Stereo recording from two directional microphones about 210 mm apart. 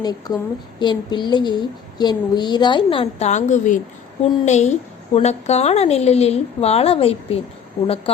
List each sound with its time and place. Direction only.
0.0 s a woman's voice: 20° left (ahead or behind)